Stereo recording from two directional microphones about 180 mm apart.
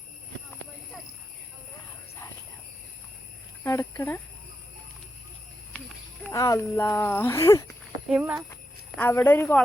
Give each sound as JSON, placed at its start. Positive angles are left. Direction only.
{"t": 3.6, "sound": "speech", "side_deg": 15}
{"t": 6.2, "sound": "speech", "side_deg": 15}
{"t": 8.1, "sound": "speech", "side_deg": -10}
{"t": 9.0, "sound": "speech", "side_deg": 10}